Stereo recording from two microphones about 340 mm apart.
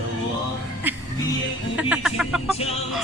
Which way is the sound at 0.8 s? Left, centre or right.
Centre.